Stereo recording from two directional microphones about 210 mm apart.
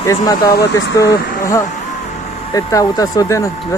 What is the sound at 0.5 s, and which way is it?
Speech, 55° left (ahead or behind).